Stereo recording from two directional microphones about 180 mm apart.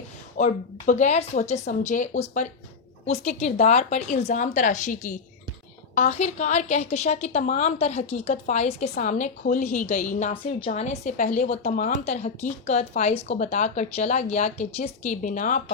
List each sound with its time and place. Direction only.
0.3 s a woman's voice: 45° left (ahead or behind)
10.7 s a woman's voice: 40° left (ahead or behind)